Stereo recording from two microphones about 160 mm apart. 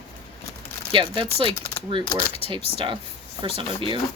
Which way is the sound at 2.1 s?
35° left (ahead or behind).